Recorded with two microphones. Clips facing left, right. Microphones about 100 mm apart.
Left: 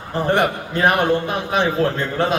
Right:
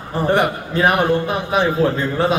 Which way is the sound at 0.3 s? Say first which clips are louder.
Right 1 dB; 5° right (ahead or behind).